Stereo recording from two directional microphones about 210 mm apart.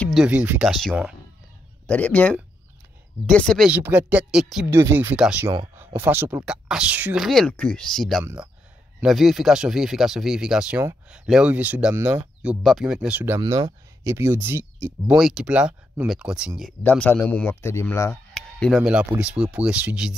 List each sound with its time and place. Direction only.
0.0 s speech: centre (ahead or behind)
16.8 s speech: 10° left (ahead or behind)
18.8 s speech: 5° right (ahead or behind)